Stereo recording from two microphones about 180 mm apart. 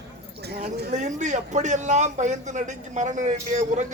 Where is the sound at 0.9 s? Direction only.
40° right (ahead or behind).